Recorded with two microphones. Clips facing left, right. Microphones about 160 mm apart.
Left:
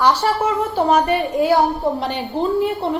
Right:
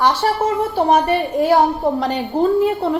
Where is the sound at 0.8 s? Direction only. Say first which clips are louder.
Right 1 dB; 35° right (ahead or behind).